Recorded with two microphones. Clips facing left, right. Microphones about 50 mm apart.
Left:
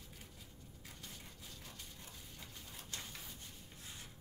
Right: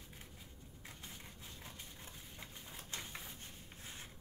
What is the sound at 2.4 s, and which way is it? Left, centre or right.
Bird, right.